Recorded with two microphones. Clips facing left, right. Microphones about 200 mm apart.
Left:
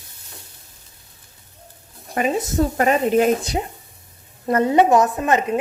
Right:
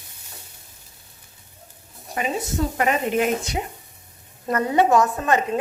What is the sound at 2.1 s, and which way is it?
Speech, 45° left (ahead or behind).